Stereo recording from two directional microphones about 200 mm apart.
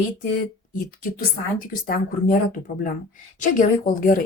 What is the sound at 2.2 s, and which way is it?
Speech, 40° left (ahead or behind).